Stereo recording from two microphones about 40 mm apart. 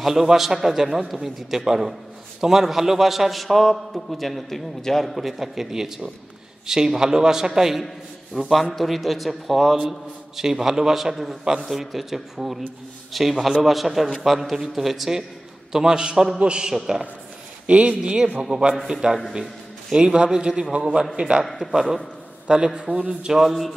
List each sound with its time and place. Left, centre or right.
0.0 s a man's voice: centre
5.1 s a man's voice: centre
8.7 s a man's voice: centre
9.8 s a man's voice: centre
17.6 s a man's voice: right
21.2 s a man's voice: right
21.6 s a man's voice: centre
22.8 s a man's voice: right
23.2 s a man's voice: centre